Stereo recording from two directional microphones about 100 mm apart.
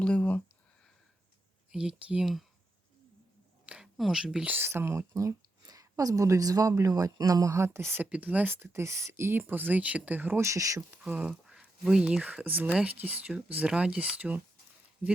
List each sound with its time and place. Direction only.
0.0 s a sound: 10° left (ahead or behind)
1.7 s speech: 10° right (ahead or behind)
3.7 s speech: 5° right (ahead or behind); by 10.8 s 30° right (ahead or behind)
10.9 s speech: 15° right (ahead or behind)
11.3 s speech: 5° right (ahead or behind)